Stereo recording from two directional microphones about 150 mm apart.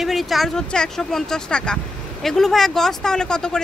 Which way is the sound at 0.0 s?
Centre (ahead or behind).